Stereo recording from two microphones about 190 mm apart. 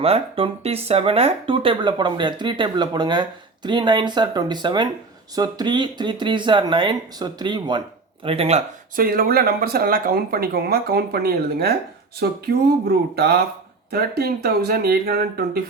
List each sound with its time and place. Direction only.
0.0 s speech: 30° right (ahead or behind)
9.0 s speech: 50° right (ahead or behind)